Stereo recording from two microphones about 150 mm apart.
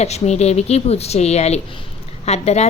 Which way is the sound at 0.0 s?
45° left (ahead or behind).